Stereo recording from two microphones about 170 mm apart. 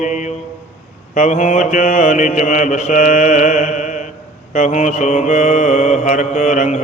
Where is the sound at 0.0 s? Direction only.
45° left (ahead or behind).